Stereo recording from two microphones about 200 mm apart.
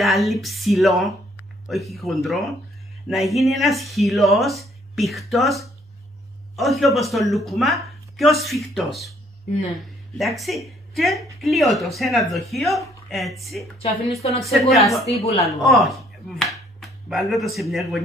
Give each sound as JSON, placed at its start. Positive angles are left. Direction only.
{"t": 0.0, "sound": "speech", "side_deg": 0}
{"t": 10.1, "sound": "speech", "side_deg": 0}